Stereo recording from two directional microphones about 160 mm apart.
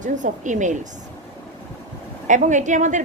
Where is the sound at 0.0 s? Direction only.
50° right (ahead or behind).